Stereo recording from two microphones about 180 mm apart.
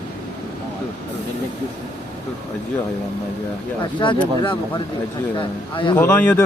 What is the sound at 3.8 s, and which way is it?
Speech, 25° left (ahead or behind).